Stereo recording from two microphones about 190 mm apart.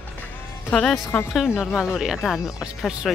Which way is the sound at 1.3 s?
Centre (ahead or behind).